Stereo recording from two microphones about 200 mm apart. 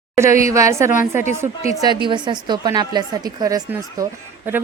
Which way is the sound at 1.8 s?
25° right (ahead or behind).